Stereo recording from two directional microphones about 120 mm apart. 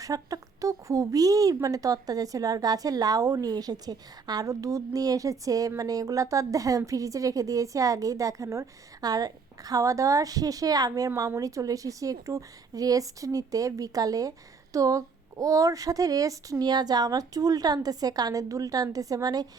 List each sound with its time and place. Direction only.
0.0 s a woman's voice: 30° right (ahead or behind)